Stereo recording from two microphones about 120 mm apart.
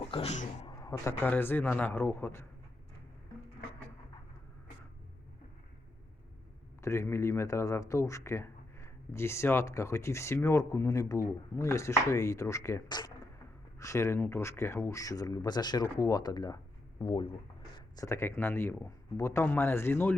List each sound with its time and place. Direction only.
0.1 s speech: 60° left (ahead or behind)
0.7 s a man's voice: 25° left (ahead or behind)
6.8 s speech: 20° left (ahead or behind)
17.0 s speech: 40° left (ahead or behind)
17.7 s speech: 30° left (ahead or behind)